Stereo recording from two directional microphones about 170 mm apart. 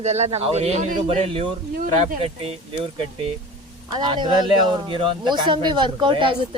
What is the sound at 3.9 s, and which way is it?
Speech, 25° right (ahead or behind).